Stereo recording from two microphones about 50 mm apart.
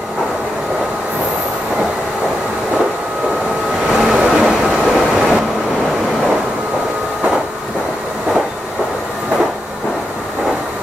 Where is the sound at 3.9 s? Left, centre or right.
Centre.